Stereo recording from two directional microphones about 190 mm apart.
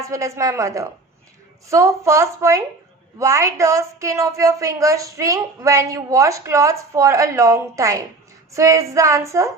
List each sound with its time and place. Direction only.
0.0 s a woman's voice: 15° right (ahead or behind)